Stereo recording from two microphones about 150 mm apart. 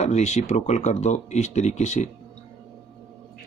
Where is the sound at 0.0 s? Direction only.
50° left (ahead or behind).